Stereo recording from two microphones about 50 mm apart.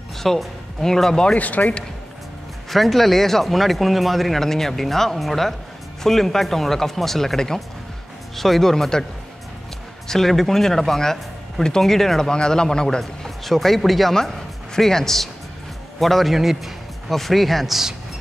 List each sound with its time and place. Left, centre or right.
0.2 s speech: centre
1.2 s speech: left
2.7 s speech: centre
10.0 s speech: centre